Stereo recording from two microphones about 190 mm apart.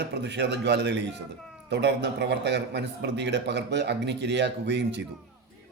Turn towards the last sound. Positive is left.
turn(degrees=-65)  # may be behind; listen again after turning